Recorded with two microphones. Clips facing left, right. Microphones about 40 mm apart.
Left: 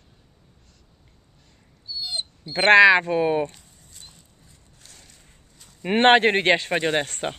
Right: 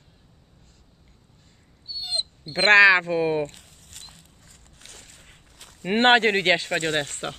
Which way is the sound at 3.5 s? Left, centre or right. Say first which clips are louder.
Right 3 dB; right.